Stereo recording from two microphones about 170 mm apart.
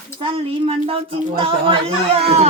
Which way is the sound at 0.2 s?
30° right (ahead or behind).